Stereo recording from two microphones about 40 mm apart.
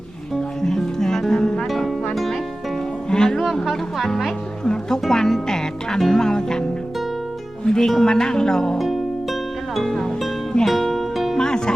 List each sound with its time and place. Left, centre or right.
0.6 s music: centre
1.6 s music: centre
3.1 s music: centre
3.3 s a sound: centre
3.7 s music: centre
4.6 s music: left
7.6 s speech: centre
9.7 s speech: centre
10.7 s music: centre
11.3 s music: centre